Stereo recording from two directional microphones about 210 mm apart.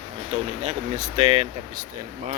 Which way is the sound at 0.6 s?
35° right (ahead or behind).